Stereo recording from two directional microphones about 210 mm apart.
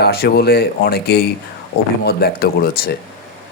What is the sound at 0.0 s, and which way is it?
Speech, 50° left (ahead or behind).